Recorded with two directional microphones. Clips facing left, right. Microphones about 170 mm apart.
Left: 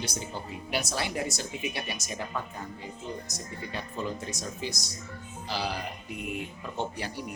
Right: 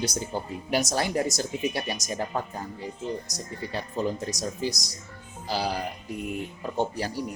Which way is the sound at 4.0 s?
40° right (ahead or behind).